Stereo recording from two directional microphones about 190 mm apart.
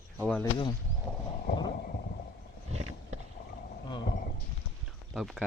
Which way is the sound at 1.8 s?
50° left (ahead or behind).